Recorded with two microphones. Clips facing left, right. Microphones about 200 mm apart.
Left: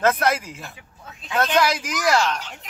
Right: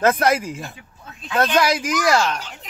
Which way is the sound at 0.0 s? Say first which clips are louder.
Right 3 dB; 10° right (ahead or behind).